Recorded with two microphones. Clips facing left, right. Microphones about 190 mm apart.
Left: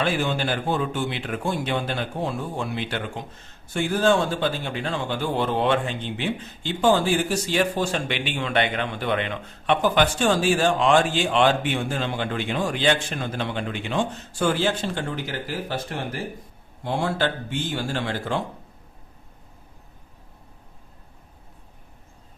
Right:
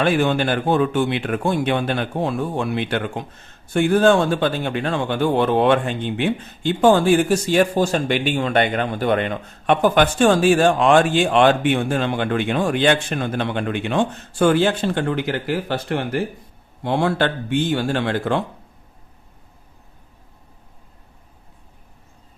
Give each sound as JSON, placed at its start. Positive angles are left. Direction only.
{"t": 0.0, "sound": "speech", "side_deg": -60}